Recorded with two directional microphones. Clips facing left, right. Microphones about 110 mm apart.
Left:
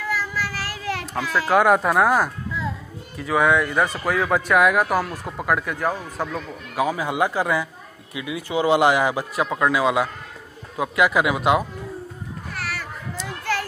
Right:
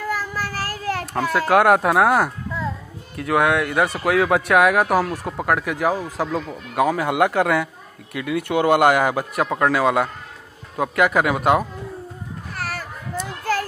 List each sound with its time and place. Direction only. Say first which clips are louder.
0.0 s child singing: right 1 dB; 45° right (ahead or behind)
1.1 s a man's voice: right 2 dB; 50° right (ahead or behind); by 4.8 s 65° right (ahead or behind)
5.1 s speech: right 4 dB; centre (ahead or behind)
5.5 s speech: right 2 dB; 90° right
6.7 s a man's voice: right 3 dB; 60° right (ahead or behind); by 11.6 s 45° right (ahead or behind)
12.5 s children playing: right 2 dB; 40° right (ahead or behind)
13.4 s a sound: right 3 dB; 40° right (ahead or behind)